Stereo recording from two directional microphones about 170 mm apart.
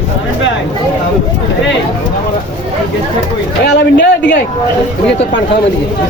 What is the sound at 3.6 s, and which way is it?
Speech, 90° left.